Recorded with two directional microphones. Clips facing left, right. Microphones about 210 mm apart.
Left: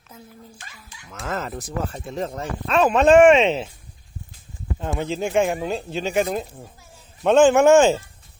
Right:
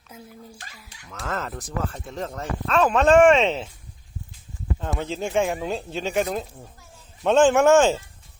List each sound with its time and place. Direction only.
0.6 s speech: 35° right (ahead or behind)
1.0 s speech: 5° left (ahead or behind)
4.8 s speech: centre (ahead or behind)
7.3 s speech: centre (ahead or behind)